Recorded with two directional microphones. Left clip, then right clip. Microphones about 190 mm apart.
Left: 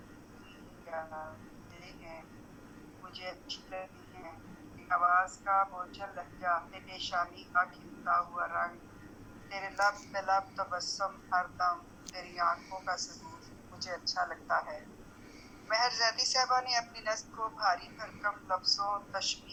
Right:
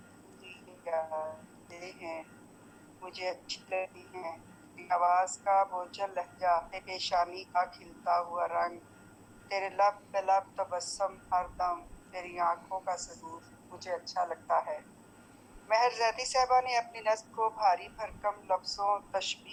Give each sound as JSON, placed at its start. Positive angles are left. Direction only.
{"t": 0.9, "sound": "a sound", "side_deg": -20}
{"t": 1.8, "sound": "vehicle", "side_deg": -20}
{"t": 3.1, "sound": "a man's voice", "side_deg": -20}